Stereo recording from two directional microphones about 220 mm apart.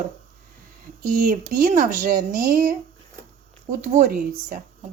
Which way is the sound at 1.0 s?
40° right (ahead or behind).